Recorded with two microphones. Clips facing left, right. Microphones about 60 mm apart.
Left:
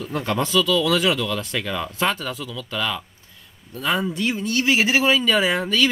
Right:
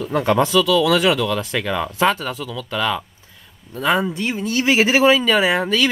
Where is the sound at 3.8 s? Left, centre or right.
Right.